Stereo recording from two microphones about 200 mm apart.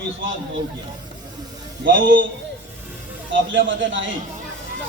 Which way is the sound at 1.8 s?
70° right (ahead or behind).